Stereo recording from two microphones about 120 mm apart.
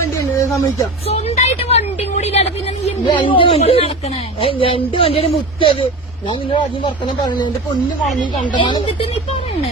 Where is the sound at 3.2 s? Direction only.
45° left (ahead or behind).